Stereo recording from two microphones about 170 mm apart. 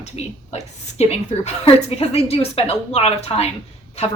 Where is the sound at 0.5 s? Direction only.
40° left (ahead or behind).